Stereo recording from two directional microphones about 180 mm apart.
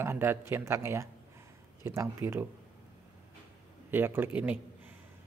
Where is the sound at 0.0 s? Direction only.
10° right (ahead or behind).